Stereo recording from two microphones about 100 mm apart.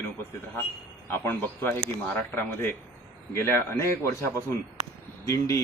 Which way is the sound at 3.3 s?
25° left (ahead or behind).